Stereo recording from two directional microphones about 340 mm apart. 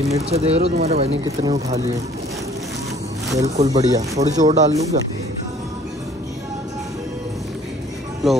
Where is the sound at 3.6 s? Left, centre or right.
Centre.